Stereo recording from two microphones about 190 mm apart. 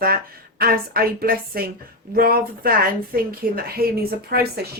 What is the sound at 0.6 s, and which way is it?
A woman's voice, 50° right (ahead or behind).